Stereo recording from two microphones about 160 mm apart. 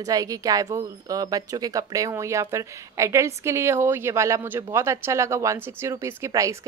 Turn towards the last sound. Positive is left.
turn(degrees=-20)  # may be behind; listen again after turning